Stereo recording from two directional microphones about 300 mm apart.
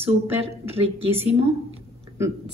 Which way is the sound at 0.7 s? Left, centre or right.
Centre.